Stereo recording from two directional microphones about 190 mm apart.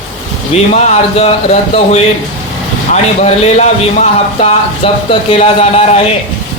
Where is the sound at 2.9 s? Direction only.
35° left (ahead or behind).